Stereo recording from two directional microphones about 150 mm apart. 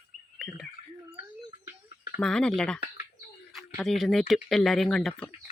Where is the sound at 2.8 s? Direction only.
85° left.